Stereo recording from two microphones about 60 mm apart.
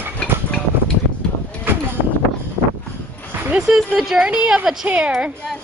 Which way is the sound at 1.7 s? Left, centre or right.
Right.